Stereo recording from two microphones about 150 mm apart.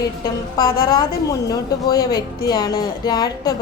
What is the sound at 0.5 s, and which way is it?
A woman's voice, 25° left (ahead or behind).